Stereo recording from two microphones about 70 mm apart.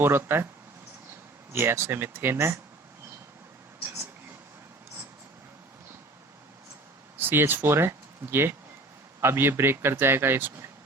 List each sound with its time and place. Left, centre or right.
0.0 s speech: right
1.5 s speech: right
7.2 s speech: right